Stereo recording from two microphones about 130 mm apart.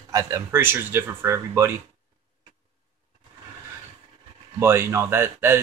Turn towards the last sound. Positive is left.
turn(degrees=-20)  # may be behind; listen again after turning